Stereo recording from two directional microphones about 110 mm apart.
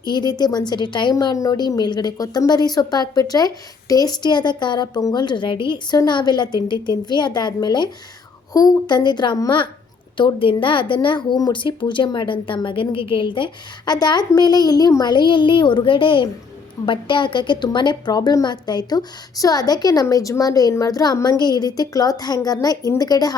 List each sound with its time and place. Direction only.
0.0 s a woman's voice: 40° left (ahead or behind)
1.1 s a woman's voice: 35° left (ahead or behind)